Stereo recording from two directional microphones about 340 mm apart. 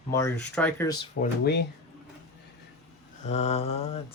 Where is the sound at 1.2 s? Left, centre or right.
Left.